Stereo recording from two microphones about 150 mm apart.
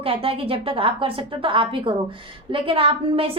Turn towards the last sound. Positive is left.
turn(degrees=-40)  # may be behind; listen again after turning